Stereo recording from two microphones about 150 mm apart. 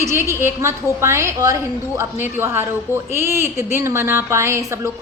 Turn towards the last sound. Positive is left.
turn(degrees=-20)  # may be behind; listen again after turning